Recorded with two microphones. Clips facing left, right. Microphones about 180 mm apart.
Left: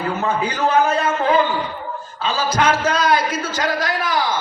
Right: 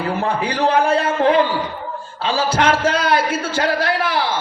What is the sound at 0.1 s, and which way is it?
A man's voice, 30° right (ahead or behind).